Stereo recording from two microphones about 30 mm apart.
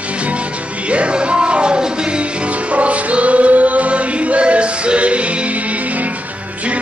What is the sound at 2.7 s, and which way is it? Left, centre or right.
Choir, right.